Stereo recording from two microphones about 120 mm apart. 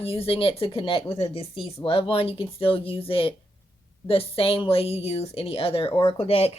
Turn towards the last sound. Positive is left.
turn(degrees=55)  # may be behind; listen again after turning